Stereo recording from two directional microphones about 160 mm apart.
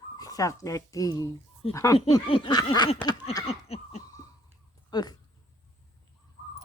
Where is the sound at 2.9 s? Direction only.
35° left (ahead or behind).